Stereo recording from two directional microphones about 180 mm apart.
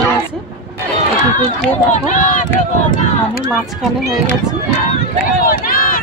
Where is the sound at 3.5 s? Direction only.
Centre (ahead or behind).